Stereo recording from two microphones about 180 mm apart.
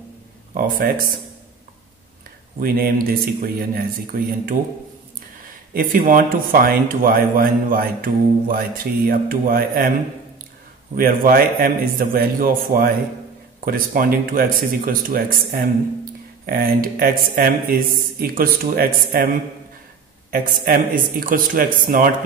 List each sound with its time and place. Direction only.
0.6 s speech: 50° right (ahead or behind)
2.6 s speech: 55° right (ahead or behind)
5.7 s speech: 55° right (ahead or behind)
11.0 s speech: 55° right (ahead or behind)
13.9 s speech: 50° right (ahead or behind)